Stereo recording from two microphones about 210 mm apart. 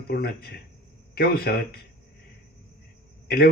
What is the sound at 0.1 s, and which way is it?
A man's voice, 50° left (ahead or behind).